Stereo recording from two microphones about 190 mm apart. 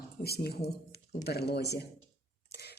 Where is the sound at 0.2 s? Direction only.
55° left (ahead or behind).